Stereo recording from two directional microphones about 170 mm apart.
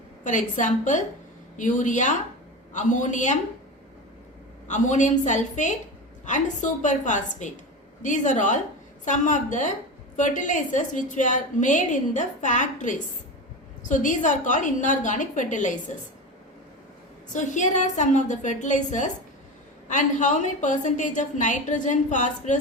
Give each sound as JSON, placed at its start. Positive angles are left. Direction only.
{"t": 0.3, "sound": "a woman's voice", "side_deg": 45}
{"t": 4.7, "sound": "a woman's voice", "side_deg": 45}
{"t": 17.3, "sound": "a woman's voice", "side_deg": 45}